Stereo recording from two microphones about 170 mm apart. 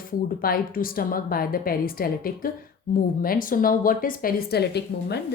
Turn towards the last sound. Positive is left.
turn(degrees=75)  # may be behind; listen again after turning